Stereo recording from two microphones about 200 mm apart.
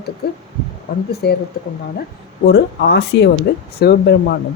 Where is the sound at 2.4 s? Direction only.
55° left (ahead or behind).